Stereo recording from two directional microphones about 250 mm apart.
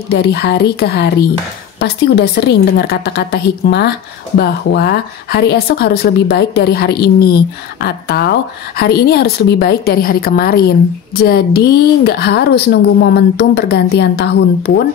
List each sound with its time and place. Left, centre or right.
0.1 s a woman's voice: left